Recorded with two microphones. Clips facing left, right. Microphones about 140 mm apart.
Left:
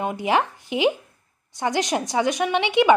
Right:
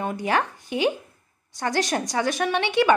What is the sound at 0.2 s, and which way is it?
A woman's voice, 20° left (ahead or behind).